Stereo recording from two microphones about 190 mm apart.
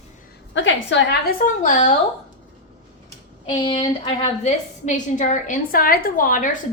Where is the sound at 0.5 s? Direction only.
75° left (ahead or behind).